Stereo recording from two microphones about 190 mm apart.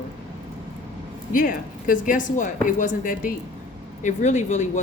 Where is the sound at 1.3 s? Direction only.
45° left (ahead or behind).